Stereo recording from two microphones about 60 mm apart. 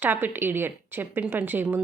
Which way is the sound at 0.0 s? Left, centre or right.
Right.